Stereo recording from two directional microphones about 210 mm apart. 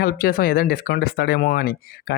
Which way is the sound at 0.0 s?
45° left (ahead or behind).